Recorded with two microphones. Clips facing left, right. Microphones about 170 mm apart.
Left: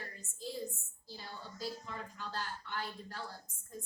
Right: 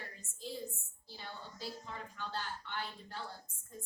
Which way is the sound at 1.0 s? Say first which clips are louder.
Left 1 dB; 40° left (ahead or behind).